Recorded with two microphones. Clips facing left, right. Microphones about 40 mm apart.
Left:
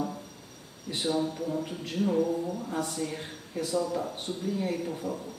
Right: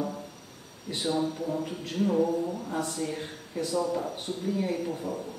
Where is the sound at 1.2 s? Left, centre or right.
Centre.